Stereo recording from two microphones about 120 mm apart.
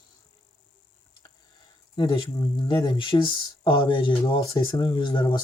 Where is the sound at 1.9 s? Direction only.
45° left (ahead or behind).